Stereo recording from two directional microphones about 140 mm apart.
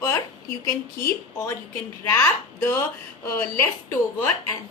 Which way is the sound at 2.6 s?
15° left (ahead or behind).